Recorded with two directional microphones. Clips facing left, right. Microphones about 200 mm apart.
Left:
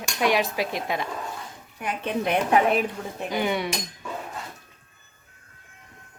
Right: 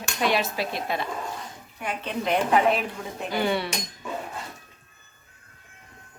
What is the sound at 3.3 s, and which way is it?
Speech, 15° left (ahead or behind).